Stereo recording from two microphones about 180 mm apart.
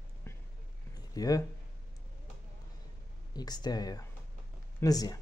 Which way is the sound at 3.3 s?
20° left (ahead or behind).